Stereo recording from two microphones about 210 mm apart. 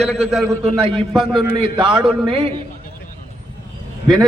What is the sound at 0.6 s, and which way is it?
Speech, 25° right (ahead or behind).